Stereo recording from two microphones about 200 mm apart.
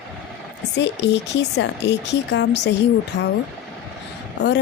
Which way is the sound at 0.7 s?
60° left (ahead or behind).